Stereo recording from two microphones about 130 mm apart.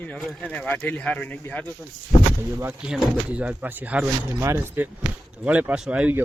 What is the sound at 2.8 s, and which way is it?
A man's voice, 5° right (ahead or behind).